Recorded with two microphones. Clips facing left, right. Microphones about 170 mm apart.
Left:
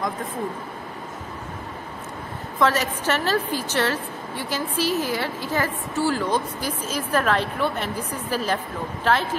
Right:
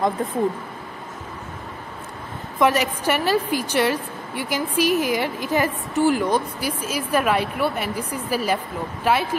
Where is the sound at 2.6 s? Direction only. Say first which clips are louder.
Right 2 dB; 15° right (ahead or behind).